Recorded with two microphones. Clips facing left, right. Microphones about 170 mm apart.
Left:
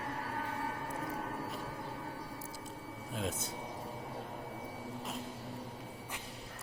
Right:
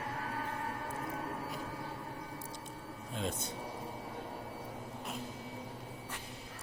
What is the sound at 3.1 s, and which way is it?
Speech, 5° left (ahead or behind).